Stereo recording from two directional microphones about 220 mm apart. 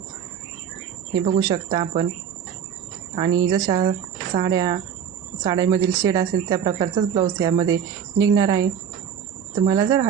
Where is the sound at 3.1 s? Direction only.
20° right (ahead or behind).